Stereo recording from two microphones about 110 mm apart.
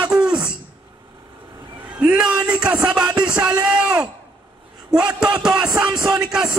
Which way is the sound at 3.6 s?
5° right (ahead or behind).